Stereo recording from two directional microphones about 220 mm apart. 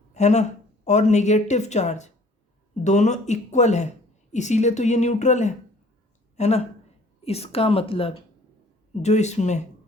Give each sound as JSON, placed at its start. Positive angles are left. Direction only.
{"t": 0.1, "sound": "a woman's voice", "side_deg": 30}